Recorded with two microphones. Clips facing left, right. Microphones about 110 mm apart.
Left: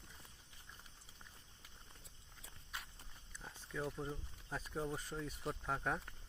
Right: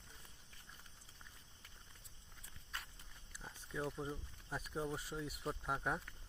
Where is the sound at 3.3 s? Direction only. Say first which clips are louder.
Even; 10° right (ahead or behind).